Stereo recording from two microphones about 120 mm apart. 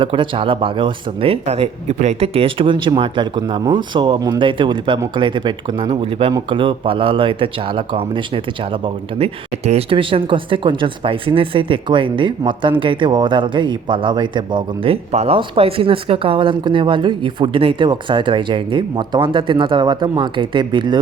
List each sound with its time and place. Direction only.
0.0 s a man's voice: 45° right (ahead or behind)
15.1 s speech: 60° right (ahead or behind)
15.4 s speech: 50° right (ahead or behind)